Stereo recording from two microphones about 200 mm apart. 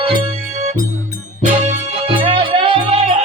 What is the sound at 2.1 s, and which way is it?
Music, 25° right (ahead or behind).